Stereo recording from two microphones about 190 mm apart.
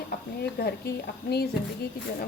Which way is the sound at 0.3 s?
55° left (ahead or behind).